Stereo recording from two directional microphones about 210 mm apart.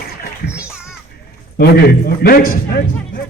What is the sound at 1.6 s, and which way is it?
Speech, 45° left (ahead or behind).